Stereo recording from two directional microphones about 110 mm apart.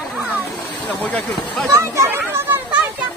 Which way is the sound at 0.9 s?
10° left (ahead or behind).